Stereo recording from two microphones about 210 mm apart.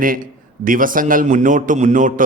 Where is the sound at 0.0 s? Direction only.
40° right (ahead or behind).